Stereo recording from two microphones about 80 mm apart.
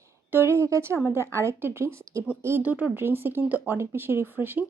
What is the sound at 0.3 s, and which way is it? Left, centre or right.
Speech, right.